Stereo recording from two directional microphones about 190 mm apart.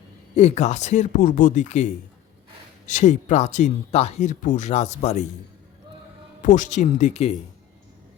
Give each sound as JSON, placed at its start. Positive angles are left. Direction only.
{"t": 0.3, "sound": "speech", "side_deg": 35}
{"t": 6.4, "sound": "speech", "side_deg": 40}